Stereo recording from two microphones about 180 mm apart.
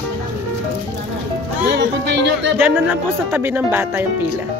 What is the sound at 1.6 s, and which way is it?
Speech, 70° right (ahead or behind).